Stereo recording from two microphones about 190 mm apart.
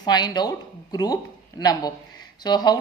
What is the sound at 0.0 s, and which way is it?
A woman's voice, 20° left (ahead or behind).